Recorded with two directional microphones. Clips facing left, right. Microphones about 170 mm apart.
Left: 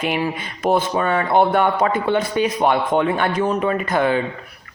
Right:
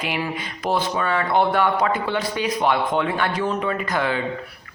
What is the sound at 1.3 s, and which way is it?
A man's voice, 50° left (ahead or behind).